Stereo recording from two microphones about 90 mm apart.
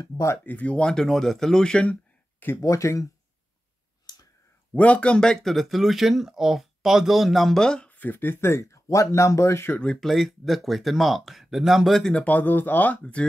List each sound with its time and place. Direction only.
0.4 s speech: 15° left (ahead or behind)
2.6 s speech: 35° left (ahead or behind)
4.0 s clicking: 45° left (ahead or behind)
4.7 s speech: 15° left (ahead or behind); by 9.8 s 30° left (ahead or behind)
9.8 s speech: 5° left (ahead or behind)